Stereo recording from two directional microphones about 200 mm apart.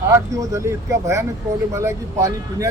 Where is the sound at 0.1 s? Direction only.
15° right (ahead or behind).